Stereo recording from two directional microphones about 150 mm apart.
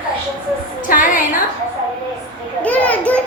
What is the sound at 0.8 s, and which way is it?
Music, 65° left (ahead or behind).